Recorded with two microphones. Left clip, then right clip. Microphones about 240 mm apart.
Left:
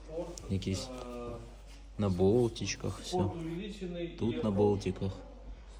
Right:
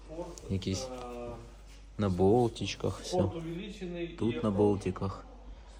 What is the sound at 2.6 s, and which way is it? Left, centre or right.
Speech, centre.